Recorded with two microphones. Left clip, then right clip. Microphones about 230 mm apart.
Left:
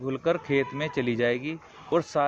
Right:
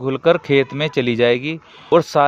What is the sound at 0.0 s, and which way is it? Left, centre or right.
Speech, right.